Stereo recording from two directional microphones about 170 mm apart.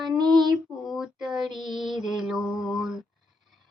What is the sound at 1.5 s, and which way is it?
Female singing, 25° right (ahead or behind).